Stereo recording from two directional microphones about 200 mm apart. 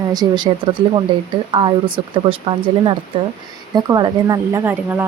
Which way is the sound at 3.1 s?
30° right (ahead or behind).